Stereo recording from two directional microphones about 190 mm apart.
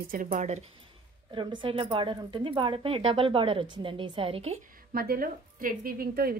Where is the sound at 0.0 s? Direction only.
45° right (ahead or behind); by 4.6 s 30° right (ahead or behind).